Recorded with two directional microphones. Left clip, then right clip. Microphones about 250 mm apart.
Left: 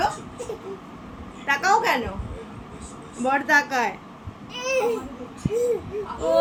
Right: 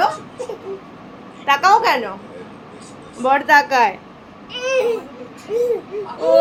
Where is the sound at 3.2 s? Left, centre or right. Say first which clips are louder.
Right 7 dB; centre.